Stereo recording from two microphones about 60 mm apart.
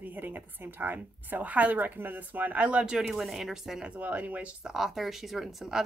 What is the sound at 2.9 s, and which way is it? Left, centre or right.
Speech, centre.